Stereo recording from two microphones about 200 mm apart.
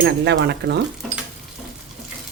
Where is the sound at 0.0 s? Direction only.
60° right (ahead or behind).